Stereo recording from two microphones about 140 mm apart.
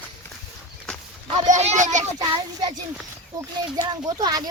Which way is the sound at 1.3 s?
55° right (ahead or behind).